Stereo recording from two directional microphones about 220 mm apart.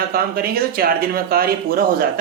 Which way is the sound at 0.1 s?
45° right (ahead or behind).